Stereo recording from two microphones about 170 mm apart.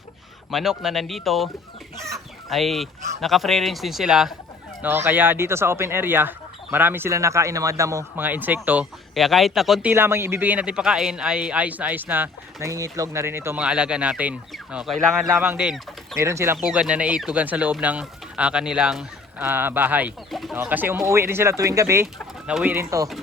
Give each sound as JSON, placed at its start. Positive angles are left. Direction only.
{"t": 0.5, "sound": "a man's voice", "side_deg": 0}
{"t": 2.0, "sound": "chicken", "side_deg": -20}
{"t": 2.5, "sound": "a man's voice", "side_deg": 0}
{"t": 9.9, "sound": "a man's voice", "side_deg": -15}
{"t": 16.1, "sound": "a man's voice", "side_deg": -15}
{"t": 16.6, "sound": "a man's voice", "side_deg": -5}
{"t": 22.0, "sound": "speech", "side_deg": -5}